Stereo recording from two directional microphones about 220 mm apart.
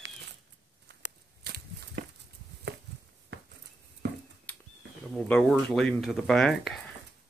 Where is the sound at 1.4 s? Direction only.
45° right (ahead or behind).